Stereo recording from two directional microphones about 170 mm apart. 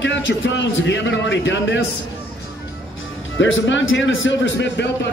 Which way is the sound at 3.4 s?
90° left.